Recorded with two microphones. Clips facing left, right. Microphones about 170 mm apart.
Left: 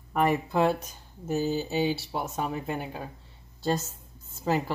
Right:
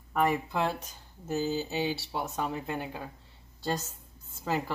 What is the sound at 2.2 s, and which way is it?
Speech, 15° left (ahead or behind).